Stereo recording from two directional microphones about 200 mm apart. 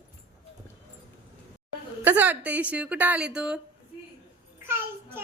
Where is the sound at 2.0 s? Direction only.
10° right (ahead or behind).